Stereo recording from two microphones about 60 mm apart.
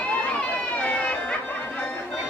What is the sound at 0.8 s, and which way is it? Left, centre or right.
Music, left.